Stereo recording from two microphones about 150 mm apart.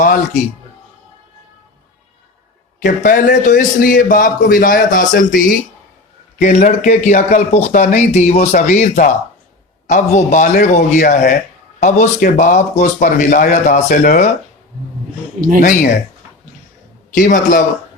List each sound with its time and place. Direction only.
0.0 s a man's voice: 65° left (ahead or behind)
2.8 s a man's voice: 65° left (ahead or behind)
6.4 s a man's voice: 55° left (ahead or behind)
15.6 s speech: 70° left (ahead or behind)
17.2 s a man's voice: 65° left (ahead or behind)